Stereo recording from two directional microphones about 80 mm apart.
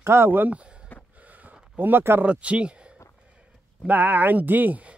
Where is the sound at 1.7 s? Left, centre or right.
Right.